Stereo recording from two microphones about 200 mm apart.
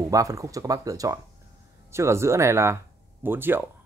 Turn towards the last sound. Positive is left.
turn(degrees=-10)  # may be behind; listen again after turning